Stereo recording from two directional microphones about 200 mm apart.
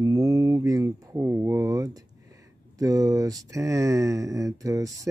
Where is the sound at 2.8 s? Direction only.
15° right (ahead or behind).